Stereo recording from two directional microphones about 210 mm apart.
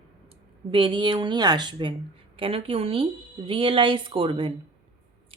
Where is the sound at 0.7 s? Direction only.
25° right (ahead or behind).